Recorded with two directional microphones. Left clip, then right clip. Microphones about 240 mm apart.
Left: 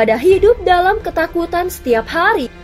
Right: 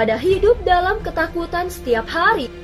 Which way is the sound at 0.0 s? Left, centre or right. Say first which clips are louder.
Left 5 dB; left.